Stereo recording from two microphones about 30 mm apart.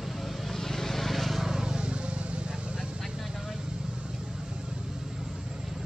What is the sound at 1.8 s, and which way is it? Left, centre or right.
Vehicle, right.